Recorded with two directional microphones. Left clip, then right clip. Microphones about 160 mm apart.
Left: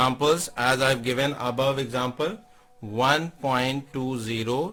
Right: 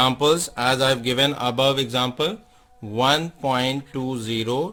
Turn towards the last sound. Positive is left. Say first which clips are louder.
# right 3 dB
turn(degrees=-20)  # may be behind; listen again after turning